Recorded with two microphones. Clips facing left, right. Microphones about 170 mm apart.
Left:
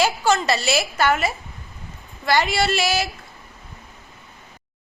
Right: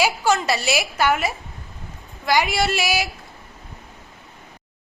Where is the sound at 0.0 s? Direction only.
10° right (ahead or behind).